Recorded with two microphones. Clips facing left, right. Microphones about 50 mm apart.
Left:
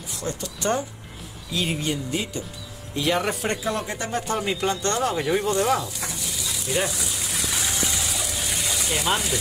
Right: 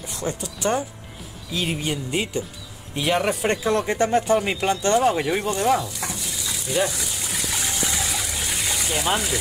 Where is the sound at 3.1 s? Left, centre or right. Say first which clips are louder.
Right 4 dB; centre.